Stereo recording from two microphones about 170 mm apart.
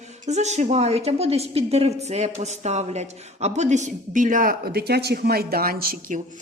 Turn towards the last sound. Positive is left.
turn(degrees=-50)  # may be behind; listen again after turning